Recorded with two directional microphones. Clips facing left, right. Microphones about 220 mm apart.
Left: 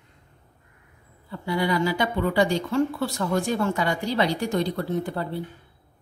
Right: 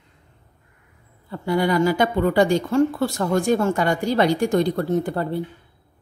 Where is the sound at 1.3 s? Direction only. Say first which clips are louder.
Right 4 dB; 50° right (ahead or behind).